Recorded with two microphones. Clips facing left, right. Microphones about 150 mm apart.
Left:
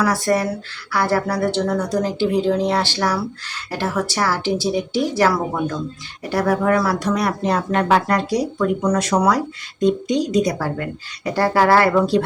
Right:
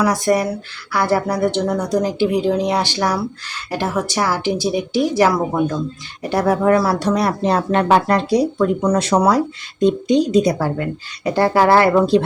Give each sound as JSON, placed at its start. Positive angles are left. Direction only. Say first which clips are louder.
{"t": 0.0, "sound": "speech", "louder": "right 2 dB", "side_deg": -15}